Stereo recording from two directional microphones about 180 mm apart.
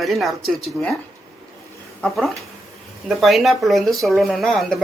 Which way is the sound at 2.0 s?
Centre (ahead or behind).